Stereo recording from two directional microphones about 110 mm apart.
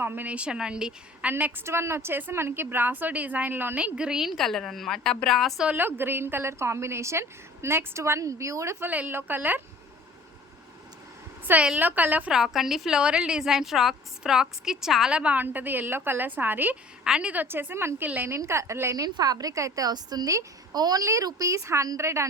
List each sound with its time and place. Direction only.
0.0 s a woman's voice: 20° right (ahead or behind); by 5.6 s centre (ahead or behind)
5.6 s a woman's voice: 20° right (ahead or behind)
11.4 s a woman's voice: 10° right (ahead or behind)